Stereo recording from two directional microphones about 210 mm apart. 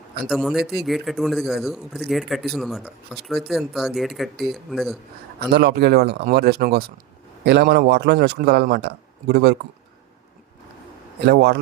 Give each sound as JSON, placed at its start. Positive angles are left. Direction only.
{"t": 0.3, "sound": "speech", "side_deg": 0}
{"t": 5.4, "sound": "a man's voice", "side_deg": -50}
{"t": 11.3, "sound": "a man's voice", "side_deg": -50}